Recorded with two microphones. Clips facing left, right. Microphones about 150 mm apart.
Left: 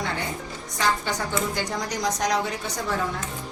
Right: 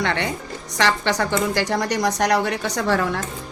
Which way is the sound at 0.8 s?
80° right.